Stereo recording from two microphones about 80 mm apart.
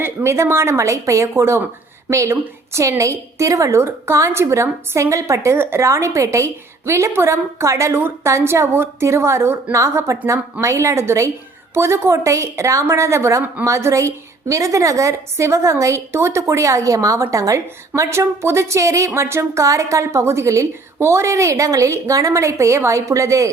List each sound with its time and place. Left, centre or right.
0.0 s a woman's voice: right